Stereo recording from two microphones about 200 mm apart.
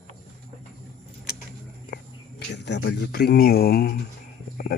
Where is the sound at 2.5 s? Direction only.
65° left (ahead or behind).